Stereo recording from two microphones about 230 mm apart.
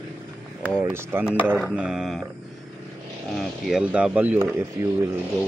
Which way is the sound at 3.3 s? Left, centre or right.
Centre.